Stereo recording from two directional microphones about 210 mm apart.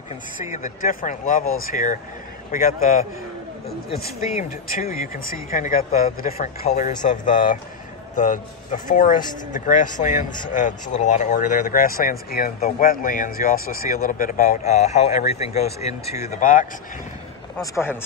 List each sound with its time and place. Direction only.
0.5 s speech: 35° left (ahead or behind)
4.4 s speech: 40° left (ahead or behind)